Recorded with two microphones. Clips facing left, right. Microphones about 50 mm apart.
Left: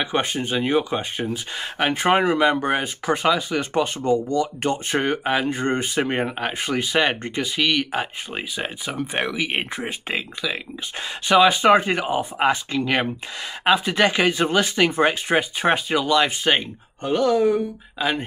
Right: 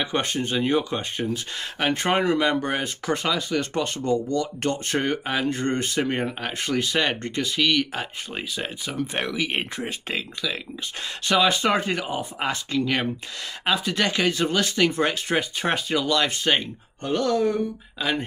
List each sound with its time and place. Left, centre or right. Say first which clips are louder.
0.0 s speech: left 2 dB; centre